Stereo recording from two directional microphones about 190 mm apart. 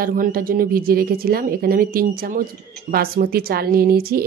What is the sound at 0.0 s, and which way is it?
Speech, 50° right (ahead or behind).